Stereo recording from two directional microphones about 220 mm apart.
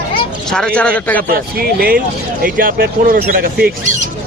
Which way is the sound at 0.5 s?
5° left (ahead or behind).